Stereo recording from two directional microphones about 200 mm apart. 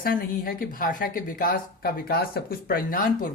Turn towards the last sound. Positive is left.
turn(degrees=45)  # may be behind; listen again after turning